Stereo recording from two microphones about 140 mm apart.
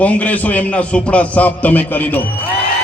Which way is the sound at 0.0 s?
10° left (ahead or behind).